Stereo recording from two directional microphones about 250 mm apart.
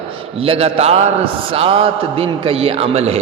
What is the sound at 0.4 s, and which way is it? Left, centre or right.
A man's voice, right.